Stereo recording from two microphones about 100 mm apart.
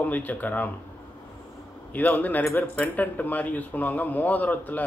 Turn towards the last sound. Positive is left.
turn(degrees=15)  # may be behind; listen again after turning